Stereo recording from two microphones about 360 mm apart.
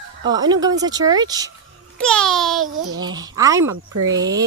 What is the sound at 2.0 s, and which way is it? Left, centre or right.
Speech, centre.